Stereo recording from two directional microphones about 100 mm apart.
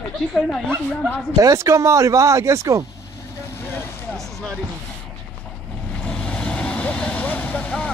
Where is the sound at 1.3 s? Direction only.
30° right (ahead or behind).